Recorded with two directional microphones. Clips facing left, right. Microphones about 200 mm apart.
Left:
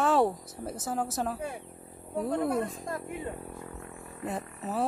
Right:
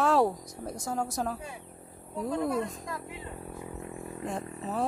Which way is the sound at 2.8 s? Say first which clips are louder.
Left 3 dB; 50° left (ahead or behind).